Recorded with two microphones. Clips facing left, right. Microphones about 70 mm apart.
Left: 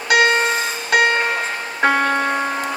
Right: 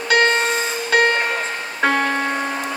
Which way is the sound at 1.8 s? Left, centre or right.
Centre.